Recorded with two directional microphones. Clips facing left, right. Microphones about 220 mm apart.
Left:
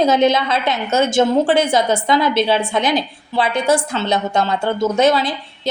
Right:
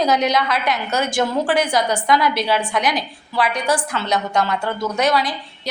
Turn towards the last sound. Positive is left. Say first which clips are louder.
# left 5 dB
turn(degrees=25)  # may be behind; listen again after turning